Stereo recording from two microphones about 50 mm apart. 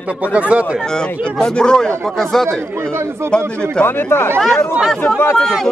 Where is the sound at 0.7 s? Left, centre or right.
Centre.